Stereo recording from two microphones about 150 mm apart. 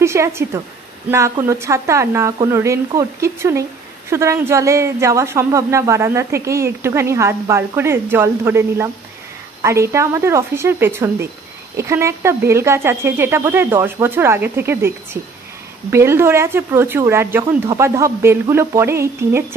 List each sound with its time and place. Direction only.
0.0 s speech: 20° right (ahead or behind)
15.9 s speech: 15° right (ahead or behind)